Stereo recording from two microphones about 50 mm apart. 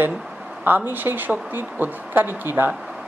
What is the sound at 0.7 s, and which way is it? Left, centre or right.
Speech, right.